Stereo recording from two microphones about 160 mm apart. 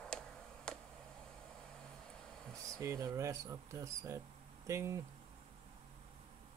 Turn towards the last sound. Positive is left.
turn(degrees=-20)  # may be behind; listen again after turning